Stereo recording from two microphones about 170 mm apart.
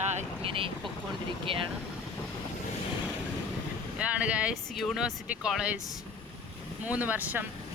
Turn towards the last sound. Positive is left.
turn(degrees=-10)  # may be behind; listen again after turning